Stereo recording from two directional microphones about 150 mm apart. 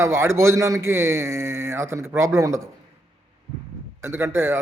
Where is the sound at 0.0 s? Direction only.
20° right (ahead or behind).